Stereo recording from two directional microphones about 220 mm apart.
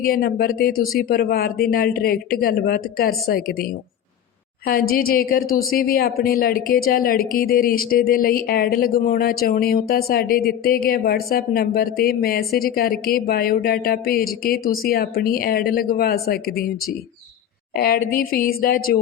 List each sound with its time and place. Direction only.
0.0 s a woman's voice: 45° left (ahead or behind)